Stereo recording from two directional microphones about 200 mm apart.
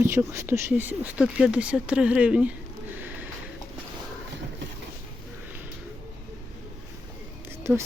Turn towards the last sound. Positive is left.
turn(degrees=-15)  # may be behind; listen again after turning